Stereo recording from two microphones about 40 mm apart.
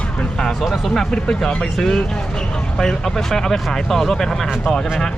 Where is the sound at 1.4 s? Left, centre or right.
Centre.